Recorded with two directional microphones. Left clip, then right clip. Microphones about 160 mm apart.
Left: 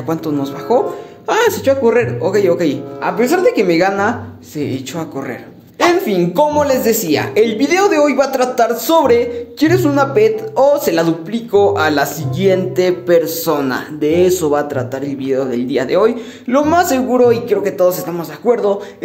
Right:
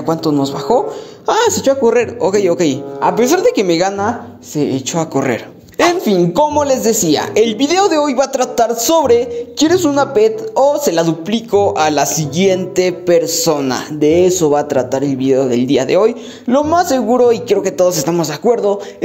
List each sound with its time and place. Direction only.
0.7 s a woman's voice: 30° right (ahead or behind)
1.9 s speech: 45° right (ahead or behind)
3.2 s speech: 60° right (ahead or behind); by 3.9 s 40° right (ahead or behind)
4.6 s a woman's voice: 30° right (ahead or behind)
5.1 s a woman's voice: 45° right (ahead or behind); by 14.5 s 25° right (ahead or behind)
14.5 s a woman's voice: 40° right (ahead or behind)
18.4 s a woman's voice: 35° right (ahead or behind)